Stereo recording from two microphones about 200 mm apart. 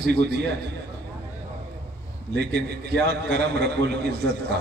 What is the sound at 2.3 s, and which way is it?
A man's voice, 55° right (ahead or behind).